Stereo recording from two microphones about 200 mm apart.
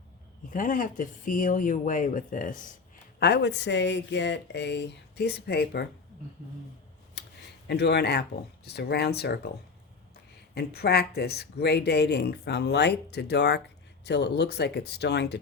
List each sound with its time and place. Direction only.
0.5 s speech: 45° left (ahead or behind)
3.2 s speech: 55° left (ahead or behind)
7.2 s a sound: 55° left (ahead or behind)
7.7 s speech: 55° left (ahead or behind)
10.5 s speech: 55° left (ahead or behind)